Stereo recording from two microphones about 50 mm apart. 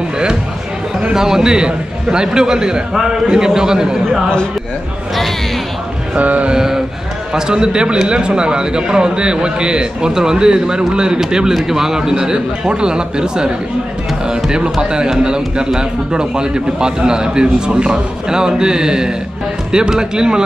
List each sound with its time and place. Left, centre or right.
1.1 s a man's voice: centre
6.1 s a sound: right
6.5 s a man's voice: centre